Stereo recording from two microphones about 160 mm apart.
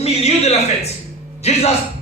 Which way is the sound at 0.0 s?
40° left (ahead or behind).